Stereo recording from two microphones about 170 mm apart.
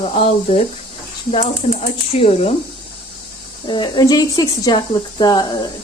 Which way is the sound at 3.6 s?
25° left (ahead or behind).